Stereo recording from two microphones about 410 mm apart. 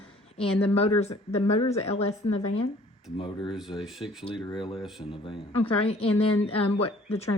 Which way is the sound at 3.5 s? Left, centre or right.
Centre.